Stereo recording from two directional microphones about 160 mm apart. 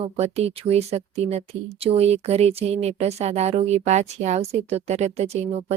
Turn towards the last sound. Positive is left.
turn(degrees=-40)  # may be behind; listen again after turning